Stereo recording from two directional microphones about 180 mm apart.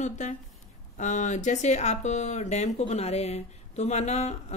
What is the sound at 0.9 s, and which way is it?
Speech, 45° left (ahead or behind).